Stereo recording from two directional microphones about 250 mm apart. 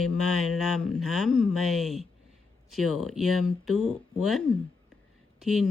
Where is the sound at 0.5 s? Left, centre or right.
Centre.